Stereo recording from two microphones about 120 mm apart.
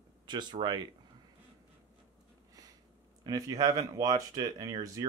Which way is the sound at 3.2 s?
25° right (ahead or behind).